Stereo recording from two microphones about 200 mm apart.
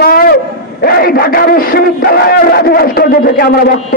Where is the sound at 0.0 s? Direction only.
45° left (ahead or behind).